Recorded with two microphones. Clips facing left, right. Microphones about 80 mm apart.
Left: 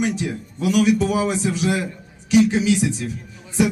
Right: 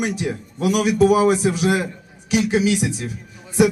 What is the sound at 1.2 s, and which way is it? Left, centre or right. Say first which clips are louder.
Speech: right 5 dB; right.